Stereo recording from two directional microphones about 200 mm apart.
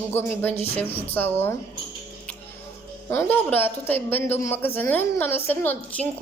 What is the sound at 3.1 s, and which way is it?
Speech, 10° left (ahead or behind).